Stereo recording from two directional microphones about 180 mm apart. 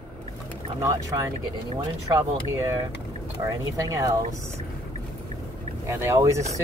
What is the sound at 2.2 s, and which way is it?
Speech, 15° right (ahead or behind).